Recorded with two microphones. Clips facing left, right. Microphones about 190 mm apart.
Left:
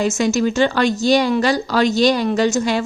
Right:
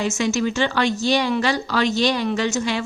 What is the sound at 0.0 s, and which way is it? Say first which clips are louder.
A woman's voice: left 4 dB; 40° left (ahead or behind).